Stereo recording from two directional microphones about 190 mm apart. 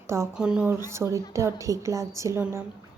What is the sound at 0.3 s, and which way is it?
A woman's voice, 5° right (ahead or behind).